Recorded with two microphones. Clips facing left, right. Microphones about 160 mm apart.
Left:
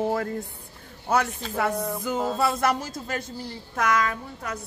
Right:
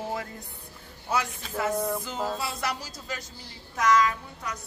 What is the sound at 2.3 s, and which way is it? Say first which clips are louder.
A woman's voice: left 8 dB; 50° left (ahead or behind).